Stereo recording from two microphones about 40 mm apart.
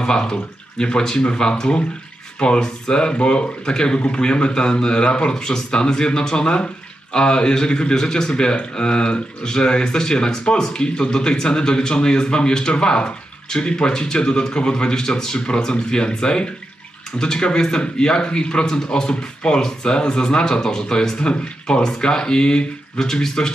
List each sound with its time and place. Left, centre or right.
0.0 s speech: centre